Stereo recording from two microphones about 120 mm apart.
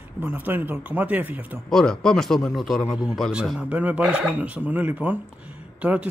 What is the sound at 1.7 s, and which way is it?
Speech, 5° left (ahead or behind).